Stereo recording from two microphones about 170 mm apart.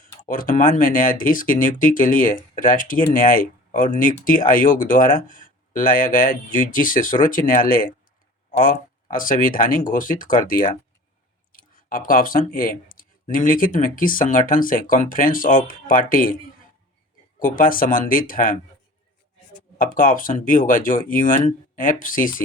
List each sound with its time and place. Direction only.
0.0 s speech: 55° left (ahead or behind)
17.4 s speech: 55° left (ahead or behind)
19.8 s speech: 55° left (ahead or behind)